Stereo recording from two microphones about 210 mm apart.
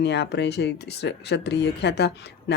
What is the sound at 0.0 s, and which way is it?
Speech, 55° left (ahead or behind).